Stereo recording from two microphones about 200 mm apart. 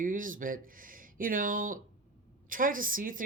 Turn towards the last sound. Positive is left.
turn(degrees=-45)  # may be behind; listen again after turning